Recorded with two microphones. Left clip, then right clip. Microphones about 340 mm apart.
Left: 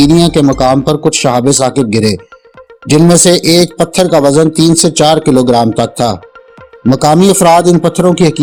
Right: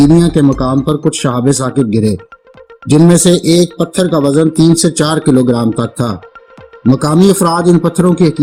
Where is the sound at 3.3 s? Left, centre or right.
Centre.